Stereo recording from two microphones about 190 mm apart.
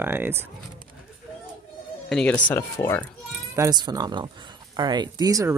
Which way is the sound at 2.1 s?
5° left (ahead or behind).